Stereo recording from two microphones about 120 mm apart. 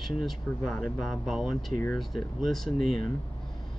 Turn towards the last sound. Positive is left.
turn(degrees=0)  # may be behind; listen again after turning